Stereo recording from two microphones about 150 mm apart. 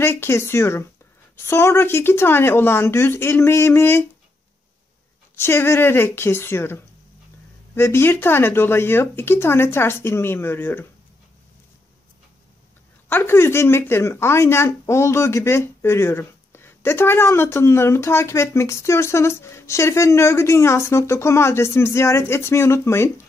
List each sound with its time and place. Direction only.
0.0 s speech: 15° left (ahead or behind)
5.3 s speech: 15° left (ahead or behind)
13.1 s speech: 15° left (ahead or behind)